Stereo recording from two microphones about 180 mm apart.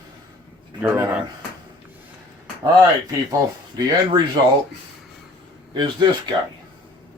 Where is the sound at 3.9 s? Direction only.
25° right (ahead or behind).